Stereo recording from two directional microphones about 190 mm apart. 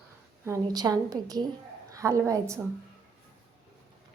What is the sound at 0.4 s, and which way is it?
A woman's voice, 15° right (ahead or behind).